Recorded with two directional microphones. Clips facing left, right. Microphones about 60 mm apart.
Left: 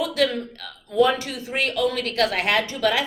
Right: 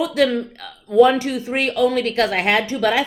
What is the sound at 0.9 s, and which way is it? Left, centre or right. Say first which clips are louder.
A woman's voice: right 6 dB; right.